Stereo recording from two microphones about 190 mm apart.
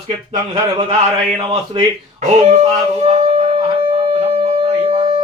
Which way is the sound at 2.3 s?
35° right (ahead or behind).